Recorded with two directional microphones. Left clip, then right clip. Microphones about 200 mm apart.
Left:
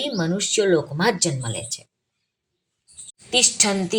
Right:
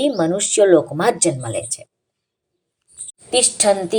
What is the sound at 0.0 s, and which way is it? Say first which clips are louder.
Speech: right 7 dB; 20° right (ahead or behind).